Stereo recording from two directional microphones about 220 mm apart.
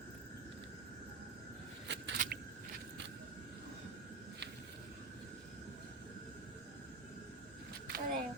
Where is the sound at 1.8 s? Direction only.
55° right (ahead or behind).